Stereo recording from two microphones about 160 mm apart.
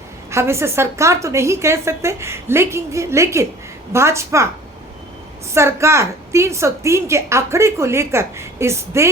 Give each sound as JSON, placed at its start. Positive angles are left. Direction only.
{"t": 0.3, "sound": "a woman's voice", "side_deg": -15}
{"t": 5.5, "sound": "a woman's voice", "side_deg": -15}